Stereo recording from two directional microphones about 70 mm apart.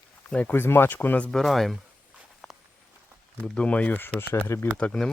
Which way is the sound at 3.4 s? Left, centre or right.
Centre.